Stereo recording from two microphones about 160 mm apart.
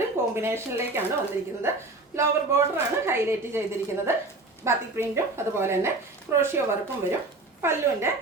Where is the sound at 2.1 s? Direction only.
15° right (ahead or behind).